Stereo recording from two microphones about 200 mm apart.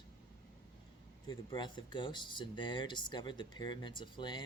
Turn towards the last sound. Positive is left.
turn(degrees=20)  # may be behind; listen again after turning